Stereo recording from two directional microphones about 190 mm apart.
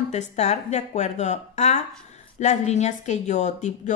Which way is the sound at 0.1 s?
35° left (ahead or behind).